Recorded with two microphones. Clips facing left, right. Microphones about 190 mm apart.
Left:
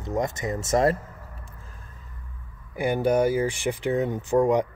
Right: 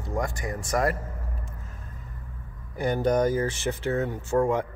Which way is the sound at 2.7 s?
10° left (ahead or behind).